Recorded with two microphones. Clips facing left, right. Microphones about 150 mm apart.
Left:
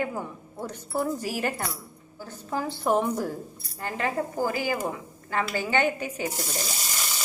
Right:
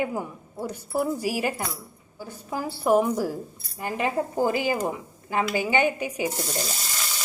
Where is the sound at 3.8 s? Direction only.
20° right (ahead or behind).